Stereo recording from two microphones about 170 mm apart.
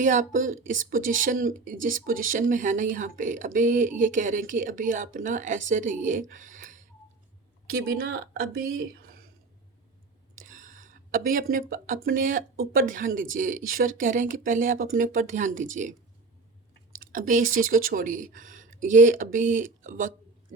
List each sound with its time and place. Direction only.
0.0 s speech: 50° right (ahead or behind)
10.4 s speech: 50° right (ahead or behind)
17.0 s speech: 55° right (ahead or behind)